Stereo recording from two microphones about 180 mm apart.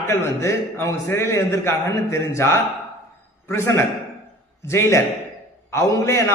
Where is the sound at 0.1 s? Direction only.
15° left (ahead or behind).